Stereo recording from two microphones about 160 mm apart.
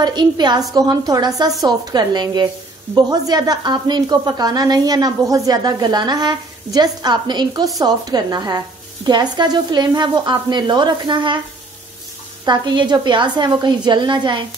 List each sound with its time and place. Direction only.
0.0 s speech: 25° right (ahead or behind)
12.4 s speech: 25° right (ahead or behind)